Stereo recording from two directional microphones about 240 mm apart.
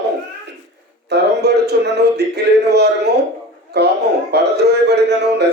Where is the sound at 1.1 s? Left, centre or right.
Right.